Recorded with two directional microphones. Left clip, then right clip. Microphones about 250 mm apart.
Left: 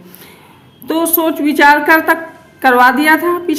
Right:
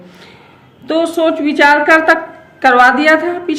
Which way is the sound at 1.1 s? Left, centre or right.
Centre.